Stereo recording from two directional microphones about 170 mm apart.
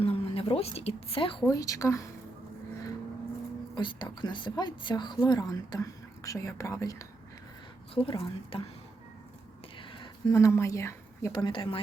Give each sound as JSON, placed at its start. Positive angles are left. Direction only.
{"t": 0.0, "sound": "a woman's voice", "side_deg": 35}
{"t": 1.5, "sound": "a woman's voice", "side_deg": 20}
{"t": 3.8, "sound": "a woman's voice", "side_deg": 25}
{"t": 7.9, "sound": "a woman's voice", "side_deg": 30}
{"t": 9.7, "sound": "a sound", "side_deg": 30}
{"t": 10.3, "sound": "a woman's voice", "side_deg": 15}